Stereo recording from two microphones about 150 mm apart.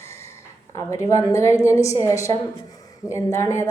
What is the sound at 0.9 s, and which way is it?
A man's voice, 20° left (ahead or behind).